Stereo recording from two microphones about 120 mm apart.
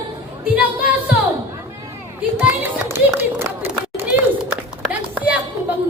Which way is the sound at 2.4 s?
20° right (ahead or behind).